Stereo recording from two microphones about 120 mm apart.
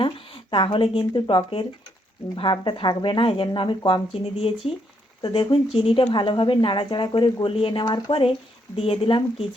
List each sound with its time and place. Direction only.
0.5 s speech: 45° left (ahead or behind)
8.7 s speech: 50° left (ahead or behind)